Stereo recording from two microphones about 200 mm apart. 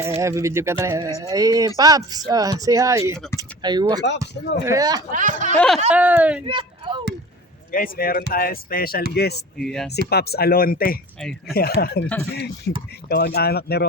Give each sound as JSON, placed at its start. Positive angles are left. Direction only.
{"t": 0.2, "sound": "speech", "side_deg": -15}
{"t": 3.2, "sound": "speech", "side_deg": 10}
{"t": 3.6, "sound": "speech", "side_deg": -20}
{"t": 4.0, "sound": "speech", "side_deg": 60}
{"t": 4.6, "sound": "speech", "side_deg": -15}
{"t": 5.1, "sound": "speech", "side_deg": -40}
{"t": 5.5, "sound": "speech", "side_deg": 5}
{"t": 6.5, "sound": "a sound", "side_deg": -25}
{"t": 7.7, "sound": "speech", "side_deg": 45}
{"t": 9.6, "sound": "speech", "side_deg": 0}
{"t": 10.1, "sound": "speech", "side_deg": 50}
{"t": 11.2, "sound": "speech", "side_deg": 5}
{"t": 11.5, "sound": "speech", "side_deg": 50}